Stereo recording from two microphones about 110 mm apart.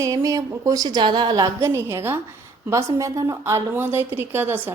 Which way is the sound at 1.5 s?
25° right (ahead or behind).